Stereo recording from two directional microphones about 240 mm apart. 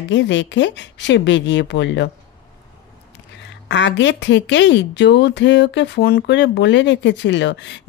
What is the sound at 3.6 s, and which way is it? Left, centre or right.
Speech, left.